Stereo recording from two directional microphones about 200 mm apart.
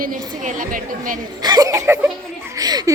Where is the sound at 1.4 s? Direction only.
20° right (ahead or behind).